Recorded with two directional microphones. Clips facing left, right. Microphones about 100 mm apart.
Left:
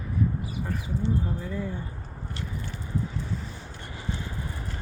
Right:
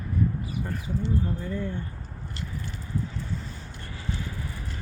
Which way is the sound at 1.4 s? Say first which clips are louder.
Right 1 dB; 5° left (ahead or behind).